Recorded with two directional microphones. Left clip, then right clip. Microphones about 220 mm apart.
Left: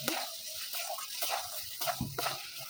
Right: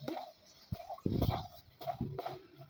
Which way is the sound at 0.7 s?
15° left (ahead or behind).